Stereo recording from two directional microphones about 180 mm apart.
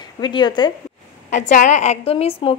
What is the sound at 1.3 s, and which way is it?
A woman's voice, 45° left (ahead or behind).